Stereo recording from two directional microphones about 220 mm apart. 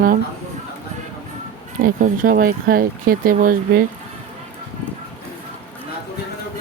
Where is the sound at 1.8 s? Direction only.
40° right (ahead or behind).